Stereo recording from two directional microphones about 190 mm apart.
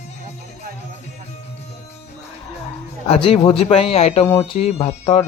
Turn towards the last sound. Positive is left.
turn(degrees=30)  # may be behind; listen again after turning